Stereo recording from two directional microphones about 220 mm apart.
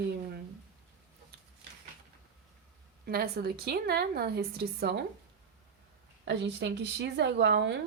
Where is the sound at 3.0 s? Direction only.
45° right (ahead or behind).